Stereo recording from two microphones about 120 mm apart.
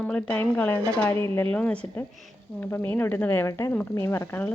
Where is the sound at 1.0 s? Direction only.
20° left (ahead or behind).